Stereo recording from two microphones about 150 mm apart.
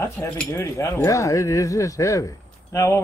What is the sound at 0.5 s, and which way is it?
Speech, 20° left (ahead or behind).